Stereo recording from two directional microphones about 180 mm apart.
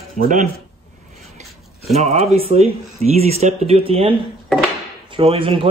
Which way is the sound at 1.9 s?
35° right (ahead or behind).